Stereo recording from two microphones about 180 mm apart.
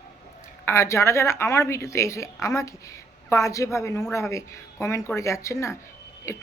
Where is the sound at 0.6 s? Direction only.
15° left (ahead or behind).